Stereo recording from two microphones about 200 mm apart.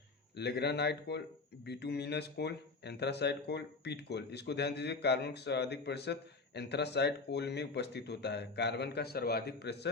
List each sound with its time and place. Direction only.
0.3 s speech: 55° left (ahead or behind)